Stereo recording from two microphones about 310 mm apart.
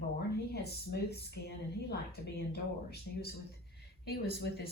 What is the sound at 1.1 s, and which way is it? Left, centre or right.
Speech, left.